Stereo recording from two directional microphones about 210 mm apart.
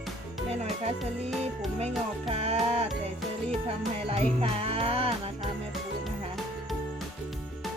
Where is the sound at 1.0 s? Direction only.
Centre (ahead or behind).